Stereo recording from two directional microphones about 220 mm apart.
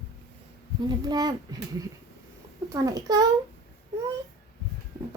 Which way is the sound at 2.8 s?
15° right (ahead or behind).